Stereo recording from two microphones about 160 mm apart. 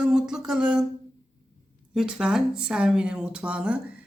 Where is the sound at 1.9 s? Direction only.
5° right (ahead or behind).